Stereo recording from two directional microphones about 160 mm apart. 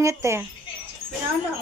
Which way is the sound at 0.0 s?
20° right (ahead or behind).